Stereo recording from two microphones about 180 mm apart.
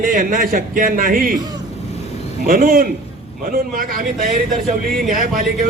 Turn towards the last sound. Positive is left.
turn(degrees=-50)  # may be behind; listen again after turning